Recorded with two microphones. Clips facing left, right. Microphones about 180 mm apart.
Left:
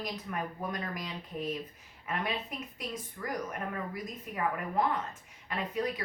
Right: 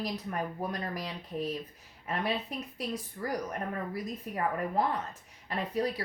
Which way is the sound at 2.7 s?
35° right (ahead or behind).